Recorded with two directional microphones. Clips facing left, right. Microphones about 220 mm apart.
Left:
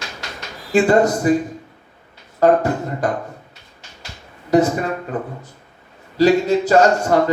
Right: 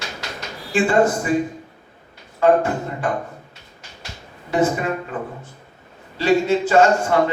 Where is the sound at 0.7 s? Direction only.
40° left (ahead or behind).